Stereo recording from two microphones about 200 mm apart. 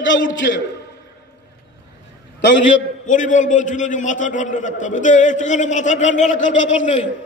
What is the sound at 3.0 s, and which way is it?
A man's voice, 40° left (ahead or behind).